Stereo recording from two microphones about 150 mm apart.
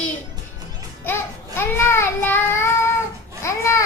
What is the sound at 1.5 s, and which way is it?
Child singing, 15° left (ahead or behind).